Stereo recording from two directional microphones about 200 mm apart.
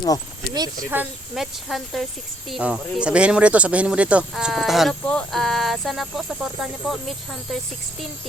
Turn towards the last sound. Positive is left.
turn(degrees=0)  # may be behind; listen again after turning